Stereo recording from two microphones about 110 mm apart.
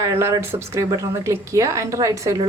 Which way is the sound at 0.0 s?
25° right (ahead or behind).